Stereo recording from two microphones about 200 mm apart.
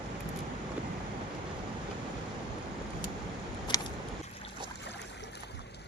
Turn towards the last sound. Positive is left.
turn(degrees=20)  # may be behind; listen again after turning